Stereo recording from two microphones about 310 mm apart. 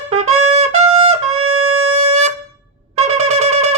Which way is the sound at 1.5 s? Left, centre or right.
Right.